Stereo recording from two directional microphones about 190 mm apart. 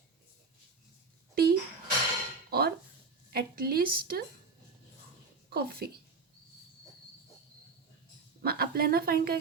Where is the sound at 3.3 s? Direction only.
55° right (ahead or behind).